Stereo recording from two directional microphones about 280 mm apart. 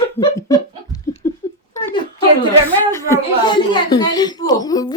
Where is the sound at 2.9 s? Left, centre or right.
Centre.